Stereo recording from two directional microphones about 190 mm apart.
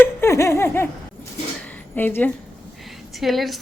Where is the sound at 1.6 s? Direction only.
10° left (ahead or behind).